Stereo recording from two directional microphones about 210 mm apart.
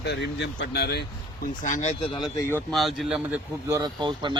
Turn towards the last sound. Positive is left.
turn(degrees=-20)  # may be behind; listen again after turning